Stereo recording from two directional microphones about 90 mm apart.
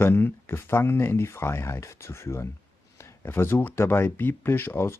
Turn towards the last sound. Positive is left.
turn(degrees=25)  # may be behind; listen again after turning